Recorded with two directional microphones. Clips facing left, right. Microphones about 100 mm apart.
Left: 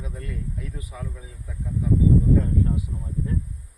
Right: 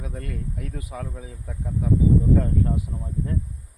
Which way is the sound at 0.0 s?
60° right (ahead or behind).